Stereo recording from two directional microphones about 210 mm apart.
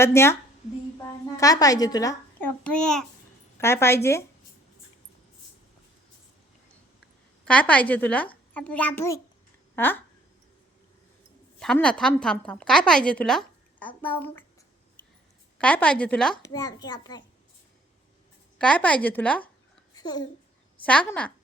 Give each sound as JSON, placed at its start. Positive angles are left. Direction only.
{"t": 0.0, "sound": "a child's voice", "side_deg": 10}
{"t": 1.4, "sound": "a woman's voice", "side_deg": 15}
{"t": 2.6, "sound": "a woman's voice", "side_deg": 5}
{"t": 7.4, "sound": "a child's voice", "side_deg": 5}
{"t": 11.6, "sound": "a woman's voice", "side_deg": 5}
{"t": 15.5, "sound": "a woman's voice", "side_deg": 5}
{"t": 16.4, "sound": "a child's voice", "side_deg": 15}
{"t": 18.6, "sound": "a woman's voice", "side_deg": 5}
{"t": 19.9, "sound": "babbling", "side_deg": 20}
{"t": 20.8, "sound": "a woman's voice", "side_deg": 5}